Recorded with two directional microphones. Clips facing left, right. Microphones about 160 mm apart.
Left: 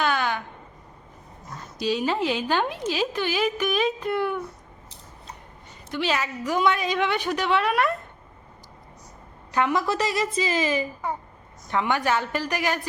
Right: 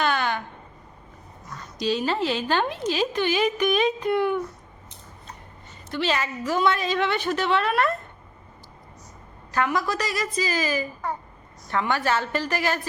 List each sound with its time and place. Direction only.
0.0 s a sound: 10° left (ahead or behind)
1.8 s a woman's voice: 10° left (ahead or behind)
5.9 s a woman's voice: 10° left (ahead or behind)
9.5 s a woman's voice: 20° left (ahead or behind)